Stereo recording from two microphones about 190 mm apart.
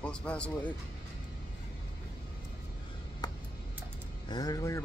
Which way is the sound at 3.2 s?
20° left (ahead or behind).